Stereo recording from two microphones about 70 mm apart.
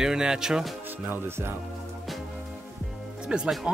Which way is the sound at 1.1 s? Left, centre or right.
Right.